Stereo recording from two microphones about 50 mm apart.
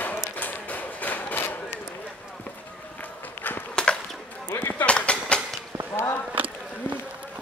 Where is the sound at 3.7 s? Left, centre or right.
Centre.